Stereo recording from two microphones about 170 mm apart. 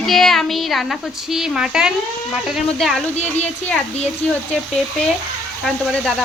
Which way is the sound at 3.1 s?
40° left (ahead or behind).